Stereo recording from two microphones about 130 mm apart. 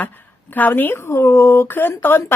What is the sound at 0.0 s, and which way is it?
A woman's voice, 15° left (ahead or behind).